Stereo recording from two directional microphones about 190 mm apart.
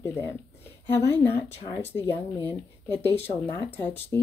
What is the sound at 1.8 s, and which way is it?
Speech, 10° left (ahead or behind).